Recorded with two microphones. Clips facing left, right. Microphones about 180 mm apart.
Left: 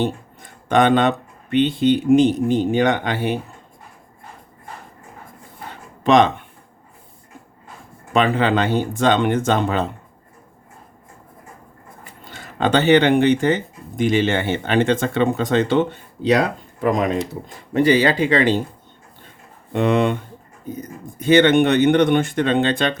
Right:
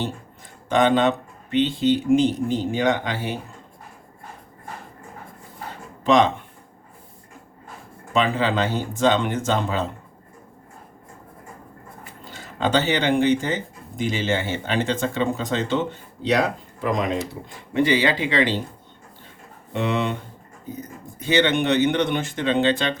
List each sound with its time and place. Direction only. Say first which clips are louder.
0.7 s speech: left 3 dB; 60° left (ahead or behind)
8.1 s speech: left 4 dB; 60° left (ahead or behind)
12.3 s speech: left 3 dB; 60° left (ahead or behind)
17.7 s speech: left 4 dB; 40° left (ahead or behind)
19.7 s speech: left 6 dB; 55° left (ahead or behind)
21.2 s speech: left 6 dB; 50° left (ahead or behind)